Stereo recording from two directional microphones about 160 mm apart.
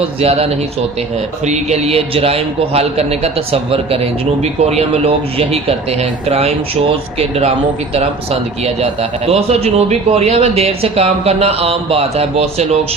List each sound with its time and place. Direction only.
0.2 s a man's voice: 40° right (ahead or behind)